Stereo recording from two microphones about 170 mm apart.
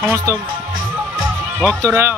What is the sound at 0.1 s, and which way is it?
Speech, 20° right (ahead or behind).